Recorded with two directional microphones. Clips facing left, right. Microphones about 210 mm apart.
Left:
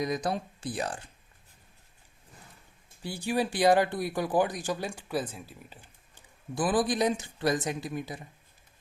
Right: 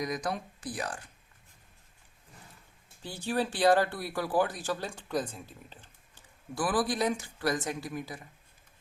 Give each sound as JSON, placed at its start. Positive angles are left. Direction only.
{"t": 0.0, "sound": "speech", "side_deg": 25}
{"t": 3.0, "sound": "speech", "side_deg": 10}